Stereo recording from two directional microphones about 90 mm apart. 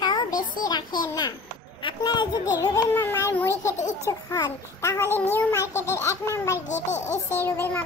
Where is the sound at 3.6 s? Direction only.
35° left (ahead or behind).